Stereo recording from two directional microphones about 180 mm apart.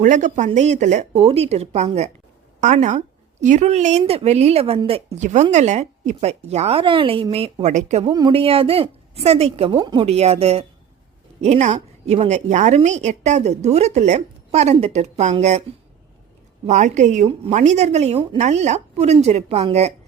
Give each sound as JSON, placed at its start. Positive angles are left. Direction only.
{"t": 0.0, "sound": "a woman's voice", "side_deg": -45}
{"t": 8.1, "sound": "a woman's voice", "side_deg": -25}
{"t": 16.6, "sound": "a woman's voice", "side_deg": -40}